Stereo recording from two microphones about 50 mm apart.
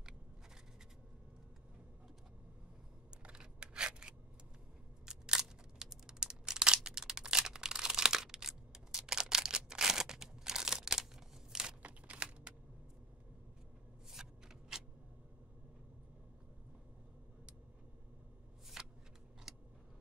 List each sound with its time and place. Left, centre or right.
3.1 s scissors: right
5.0 s a sound: centre
12.1 s computer keyboard: right
14.1 s shuffling cards: centre
18.8 s shuffling cards: centre
19.5 s vehicle: centre